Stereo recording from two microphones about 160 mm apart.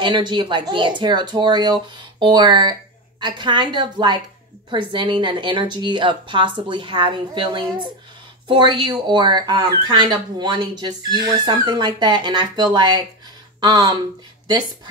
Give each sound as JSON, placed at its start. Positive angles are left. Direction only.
{"t": 0.0, "sound": "speech", "side_deg": -30}